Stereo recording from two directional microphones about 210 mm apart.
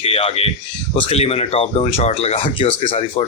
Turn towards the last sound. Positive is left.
turn(degrees=25)  # may be behind; listen again after turning